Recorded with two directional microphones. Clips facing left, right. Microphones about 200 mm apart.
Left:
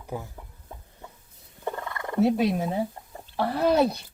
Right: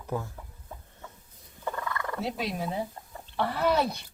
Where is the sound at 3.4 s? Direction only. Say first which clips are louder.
Left 3 dB; 35° left (ahead or behind).